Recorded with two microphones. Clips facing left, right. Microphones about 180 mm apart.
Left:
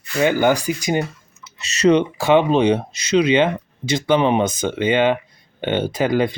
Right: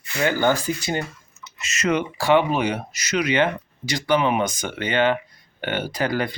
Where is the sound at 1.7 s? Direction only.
30° left (ahead or behind).